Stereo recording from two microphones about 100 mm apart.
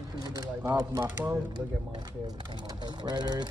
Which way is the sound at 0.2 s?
40° right (ahead or behind).